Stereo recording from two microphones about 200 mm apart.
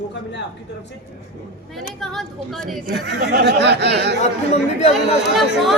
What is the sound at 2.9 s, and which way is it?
Speech, 55° right (ahead or behind).